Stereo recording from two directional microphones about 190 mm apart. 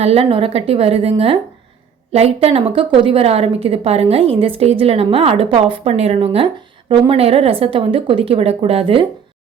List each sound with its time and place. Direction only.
0.0 s a woman's voice: 30° right (ahead or behind)